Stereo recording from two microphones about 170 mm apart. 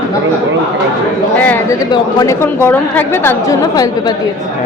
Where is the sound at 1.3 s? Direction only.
10° left (ahead or behind).